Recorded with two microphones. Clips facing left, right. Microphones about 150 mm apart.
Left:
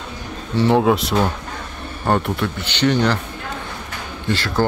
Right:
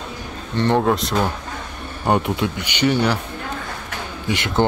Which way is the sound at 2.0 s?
15° right (ahead or behind).